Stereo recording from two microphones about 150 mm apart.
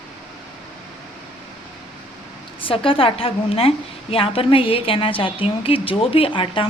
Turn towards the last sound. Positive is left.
turn(degrees=35)  # may be behind; listen again after turning